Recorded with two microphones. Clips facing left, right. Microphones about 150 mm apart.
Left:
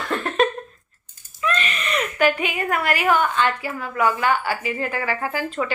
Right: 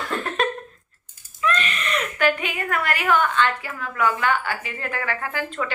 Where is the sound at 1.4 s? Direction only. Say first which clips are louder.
Even; centre (ahead or behind).